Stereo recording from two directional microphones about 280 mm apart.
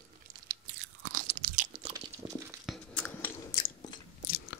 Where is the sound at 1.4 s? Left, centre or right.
Right.